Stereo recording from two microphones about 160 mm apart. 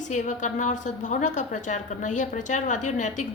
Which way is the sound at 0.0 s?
50° left (ahead or behind).